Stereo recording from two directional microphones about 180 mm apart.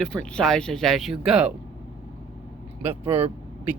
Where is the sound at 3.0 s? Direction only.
35° right (ahead or behind).